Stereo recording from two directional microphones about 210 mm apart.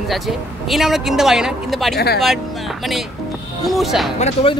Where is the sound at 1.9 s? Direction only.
50° left (ahead or behind).